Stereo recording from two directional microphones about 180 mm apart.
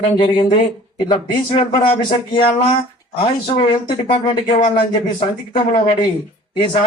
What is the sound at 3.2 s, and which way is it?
Speech, 30° left (ahead or behind).